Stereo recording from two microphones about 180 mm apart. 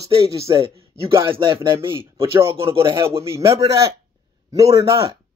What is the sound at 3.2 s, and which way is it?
A man's voice, 15° right (ahead or behind).